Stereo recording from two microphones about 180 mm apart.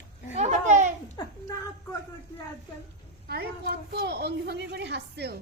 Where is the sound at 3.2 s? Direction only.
60° right (ahead or behind).